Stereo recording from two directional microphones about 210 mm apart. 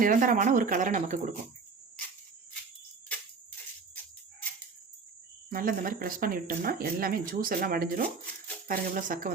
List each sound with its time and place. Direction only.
0.0 s speech: 40° right (ahead or behind)
5.5 s speech: 45° right (ahead or behind)